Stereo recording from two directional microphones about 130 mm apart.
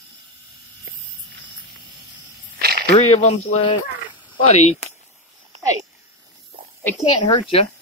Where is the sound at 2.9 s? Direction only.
55° left (ahead or behind).